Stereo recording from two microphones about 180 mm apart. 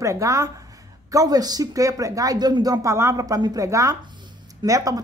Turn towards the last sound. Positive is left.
turn(degrees=-20)  # may be behind; listen again after turning